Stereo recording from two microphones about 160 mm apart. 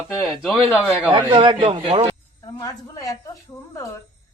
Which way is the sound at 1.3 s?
35° right (ahead or behind).